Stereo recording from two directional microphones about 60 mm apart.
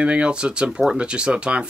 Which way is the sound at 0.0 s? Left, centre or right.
Centre.